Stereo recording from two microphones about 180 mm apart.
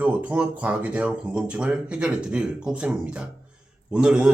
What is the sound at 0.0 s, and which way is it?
Speech, 5° right (ahead or behind).